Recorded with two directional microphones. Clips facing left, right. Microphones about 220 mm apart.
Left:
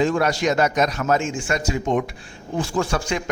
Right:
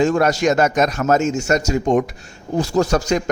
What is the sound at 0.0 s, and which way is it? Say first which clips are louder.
A man's voice: right 4 dB; 45° right (ahead or behind).